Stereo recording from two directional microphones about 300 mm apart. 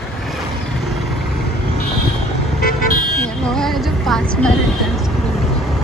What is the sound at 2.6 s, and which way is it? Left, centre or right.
Vehicle, left.